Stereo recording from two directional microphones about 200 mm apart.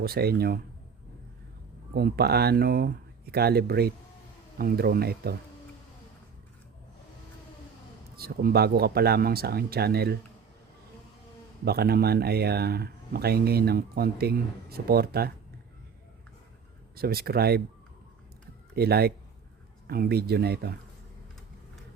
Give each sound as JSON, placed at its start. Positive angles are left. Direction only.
{"t": 0.0, "sound": "speech", "side_deg": -50}
{"t": 1.9, "sound": "speech", "side_deg": -50}
{"t": 8.1, "sound": "speech", "side_deg": -50}
{"t": 11.6, "sound": "speech", "side_deg": -50}
{"t": 16.9, "sound": "speech", "side_deg": -50}
{"t": 18.7, "sound": "speech", "side_deg": -50}